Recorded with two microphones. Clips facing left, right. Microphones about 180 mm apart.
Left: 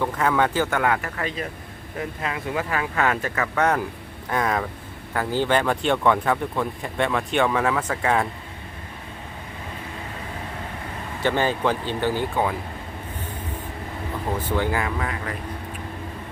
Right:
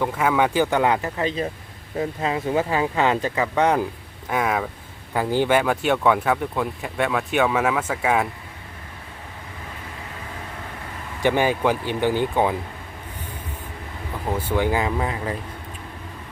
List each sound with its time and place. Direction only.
0.0 s speech: 10° right (ahead or behind)
11.2 s speech: 15° right (ahead or behind)
14.3 s speech: 10° right (ahead or behind)